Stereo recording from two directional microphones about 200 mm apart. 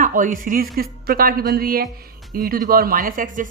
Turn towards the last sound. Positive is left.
turn(degrees=-40)  # may be behind; listen again after turning